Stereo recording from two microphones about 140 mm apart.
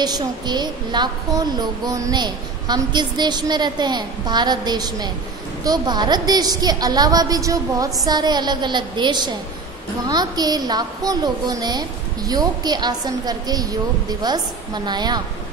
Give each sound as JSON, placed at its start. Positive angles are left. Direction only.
{"t": 0.0, "sound": "a woman's voice", "side_deg": -30}